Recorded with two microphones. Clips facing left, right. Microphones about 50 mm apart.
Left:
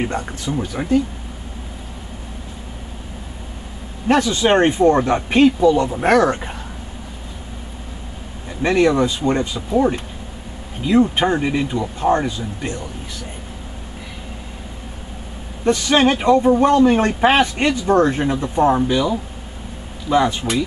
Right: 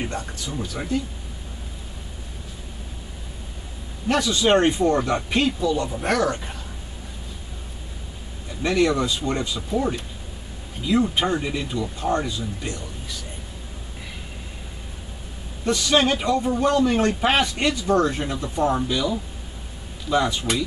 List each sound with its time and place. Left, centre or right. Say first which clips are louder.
0.0 s a man's voice: left 6 dB; left
4.1 s a man's voice: left 4 dB; left
8.5 s a man's voice: left 5 dB; left
15.6 s a man's voice: left 5 dB; left